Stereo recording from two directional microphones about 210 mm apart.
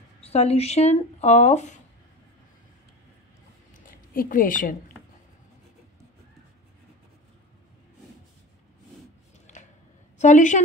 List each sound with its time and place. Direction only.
0.2 s speech: 30° left (ahead or behind)
3.8 s a woman's voice: 40° left (ahead or behind)
9.5 s a sound: 35° left (ahead or behind)
10.1 s a woman's voice: 35° left (ahead or behind)